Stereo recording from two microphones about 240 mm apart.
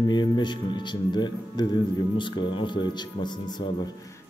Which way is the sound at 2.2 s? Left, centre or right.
Centre.